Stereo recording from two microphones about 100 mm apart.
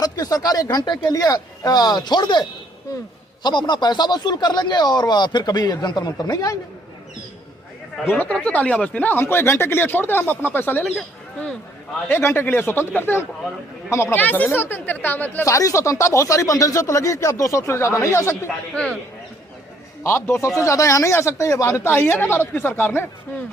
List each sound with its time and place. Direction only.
0.0 s speech: 40° left (ahead or behind)
8.0 s speech: 15° left (ahead or behind)
12.0 s speech: 25° left (ahead or behind)
15.4 s speech: 35° left (ahead or behind)
18.7 s speech: 10° left (ahead or behind)
20.1 s speech: 25° left (ahead or behind)